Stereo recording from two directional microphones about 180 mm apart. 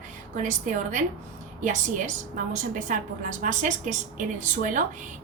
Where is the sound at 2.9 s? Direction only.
45° right (ahead or behind).